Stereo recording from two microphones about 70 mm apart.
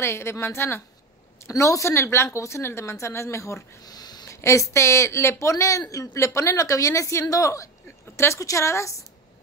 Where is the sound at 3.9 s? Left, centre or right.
Left.